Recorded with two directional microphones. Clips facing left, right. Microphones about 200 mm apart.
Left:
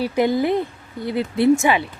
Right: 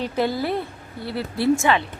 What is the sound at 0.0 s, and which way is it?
A woman's voice, 15° left (ahead or behind).